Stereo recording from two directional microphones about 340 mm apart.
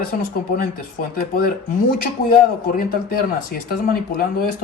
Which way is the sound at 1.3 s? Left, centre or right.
Left.